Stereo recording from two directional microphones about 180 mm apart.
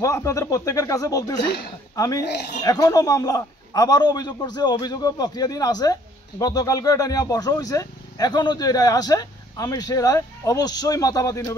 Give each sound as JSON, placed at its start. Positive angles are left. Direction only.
{"t": 0.0, "sound": "speech", "side_deg": 15}